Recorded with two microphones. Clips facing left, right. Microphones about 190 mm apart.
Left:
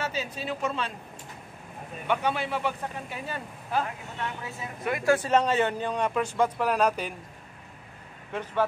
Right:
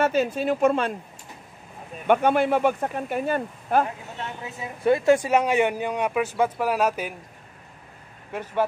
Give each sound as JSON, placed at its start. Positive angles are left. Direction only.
{"t": 0.0, "sound": "speech", "side_deg": -55}
{"t": 2.0, "sound": "speech", "side_deg": -50}
{"t": 4.8, "sound": "speech", "side_deg": -30}
{"t": 5.1, "sound": "speech", "side_deg": -10}
{"t": 8.3, "sound": "speech", "side_deg": -10}